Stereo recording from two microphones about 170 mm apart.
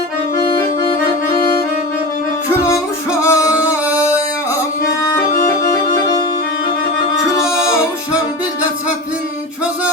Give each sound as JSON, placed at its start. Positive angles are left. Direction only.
{"t": 3.2, "sound": "music", "side_deg": 20}